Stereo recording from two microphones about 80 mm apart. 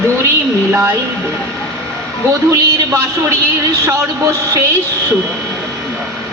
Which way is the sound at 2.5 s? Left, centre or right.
Right.